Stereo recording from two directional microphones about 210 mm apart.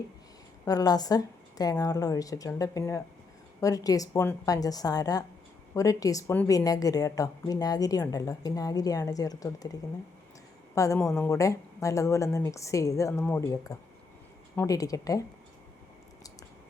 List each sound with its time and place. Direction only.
0.6 s a woman's voice: 15° left (ahead or behind)
10.8 s a woman's voice: 15° left (ahead or behind)